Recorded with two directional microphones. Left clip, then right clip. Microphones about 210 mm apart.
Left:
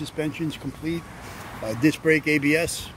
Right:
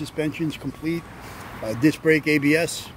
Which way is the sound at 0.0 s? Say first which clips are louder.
Right 2 dB; 15° right (ahead or behind).